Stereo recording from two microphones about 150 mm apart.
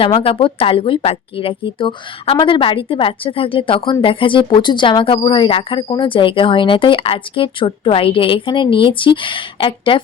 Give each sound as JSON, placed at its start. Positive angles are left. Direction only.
{"t": 0.0, "sound": "speech", "side_deg": 35}